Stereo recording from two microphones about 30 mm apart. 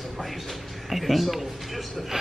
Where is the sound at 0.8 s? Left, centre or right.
Centre.